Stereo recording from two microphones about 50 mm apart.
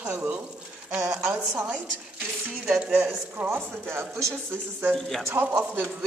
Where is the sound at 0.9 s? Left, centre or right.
Centre.